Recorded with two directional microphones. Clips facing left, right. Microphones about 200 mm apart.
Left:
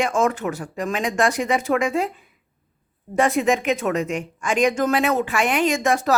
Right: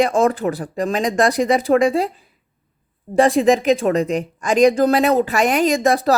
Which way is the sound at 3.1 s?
35° right (ahead or behind).